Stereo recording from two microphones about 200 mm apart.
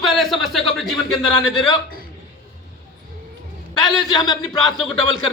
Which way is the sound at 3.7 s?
20° left (ahead or behind).